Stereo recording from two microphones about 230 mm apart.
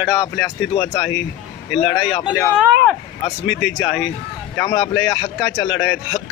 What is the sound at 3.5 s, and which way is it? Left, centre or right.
Speech, centre.